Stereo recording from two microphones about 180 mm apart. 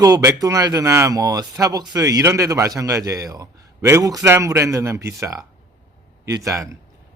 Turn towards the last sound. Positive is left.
turn(degrees=-15)  # may be behind; listen again after turning